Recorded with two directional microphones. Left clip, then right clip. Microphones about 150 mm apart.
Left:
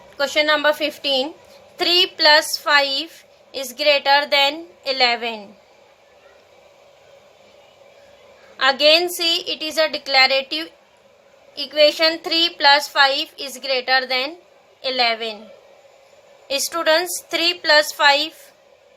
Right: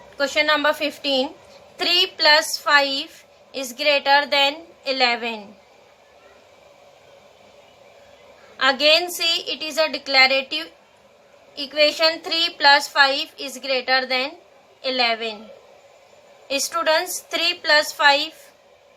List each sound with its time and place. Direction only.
0.2 s a woman's voice: 45° left (ahead or behind)
8.5 s a woman's voice: 40° left (ahead or behind)
16.5 s a woman's voice: 45° left (ahead or behind)